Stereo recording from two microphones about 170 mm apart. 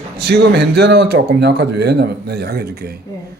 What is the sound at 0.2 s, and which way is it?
Speech, 70° right (ahead or behind).